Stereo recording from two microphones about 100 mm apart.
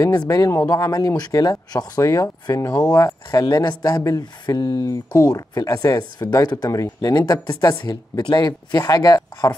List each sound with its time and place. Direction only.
0.0 s speech: 35° left (ahead or behind)